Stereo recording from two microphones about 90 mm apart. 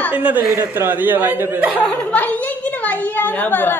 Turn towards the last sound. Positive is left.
turn(degrees=20)  # may be behind; listen again after turning